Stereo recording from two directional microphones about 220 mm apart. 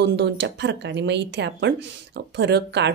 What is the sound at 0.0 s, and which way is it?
Speech, 50° right (ahead or behind).